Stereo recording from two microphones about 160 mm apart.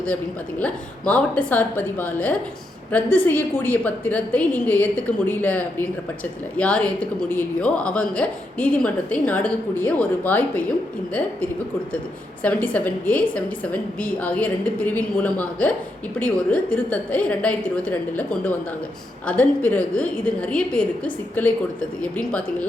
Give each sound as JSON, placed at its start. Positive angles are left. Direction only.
{"t": 0.6, "sound": "speech", "side_deg": 10}
{"t": 12.4, "sound": "speech", "side_deg": 10}